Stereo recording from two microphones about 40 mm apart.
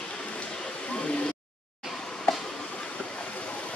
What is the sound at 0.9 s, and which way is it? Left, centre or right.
Vehicle, left.